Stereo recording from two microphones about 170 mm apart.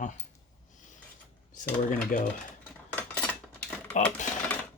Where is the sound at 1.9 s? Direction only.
55° left (ahead or behind).